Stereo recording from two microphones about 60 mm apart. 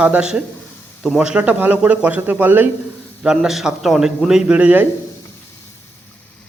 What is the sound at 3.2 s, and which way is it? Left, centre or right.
A man's voice, centre.